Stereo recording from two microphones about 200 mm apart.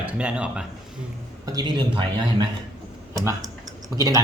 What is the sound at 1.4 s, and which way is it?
Speech, 20° right (ahead or behind).